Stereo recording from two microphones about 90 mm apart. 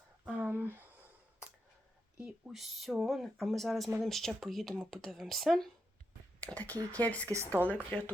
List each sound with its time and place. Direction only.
0.3 s a sound: 25° right (ahead or behind)
2.1 s speech: 5° right (ahead or behind)
6.4 s speech: 15° left (ahead or behind)
7.3 s speech: 30° right (ahead or behind)
7.7 s speech: 15° left (ahead or behind)